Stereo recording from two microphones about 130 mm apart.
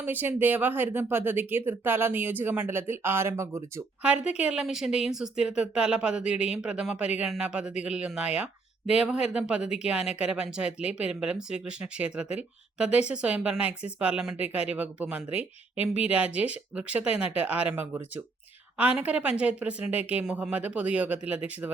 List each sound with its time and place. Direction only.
0.0 s speech: 15° right (ahead or behind)
4.0 s speech: 10° right (ahead or behind)